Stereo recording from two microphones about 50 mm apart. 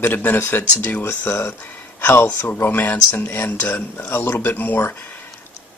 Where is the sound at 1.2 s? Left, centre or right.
Left.